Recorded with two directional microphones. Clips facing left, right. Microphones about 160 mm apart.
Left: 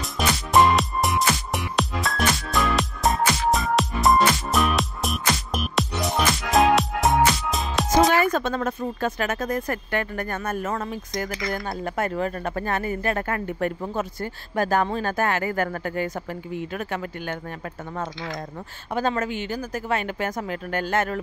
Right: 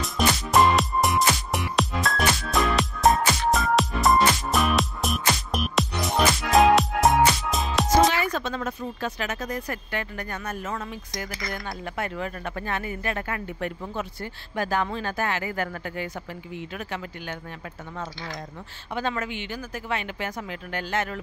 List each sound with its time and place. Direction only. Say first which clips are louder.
0.0 s music: right 1 dB; centre (ahead or behind)
8.1 s speech: left 6 dB; 50° left (ahead or behind)
18.9 s speech: left 4 dB; 40° left (ahead or behind)